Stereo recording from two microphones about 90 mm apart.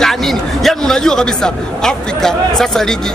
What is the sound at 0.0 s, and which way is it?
A man's voice, 5° left (ahead or behind).